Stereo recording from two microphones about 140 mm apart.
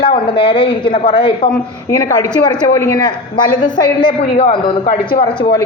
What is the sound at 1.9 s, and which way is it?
Speech, 20° left (ahead or behind).